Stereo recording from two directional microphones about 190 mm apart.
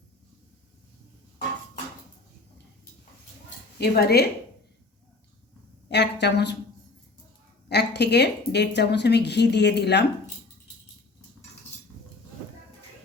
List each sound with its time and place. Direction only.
3.8 s speech: 55° left (ahead or behind)
5.9 s speech: 65° left (ahead or behind)
7.7 s speech: 60° left (ahead or behind)